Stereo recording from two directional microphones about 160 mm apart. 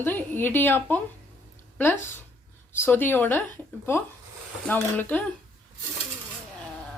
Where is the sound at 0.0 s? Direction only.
15° left (ahead or behind).